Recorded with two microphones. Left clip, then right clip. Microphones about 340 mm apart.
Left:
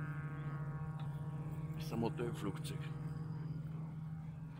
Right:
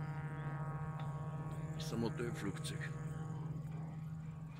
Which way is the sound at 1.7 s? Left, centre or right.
Centre.